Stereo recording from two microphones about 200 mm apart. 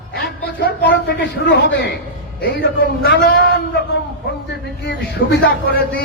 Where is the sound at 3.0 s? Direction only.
50° left (ahead or behind).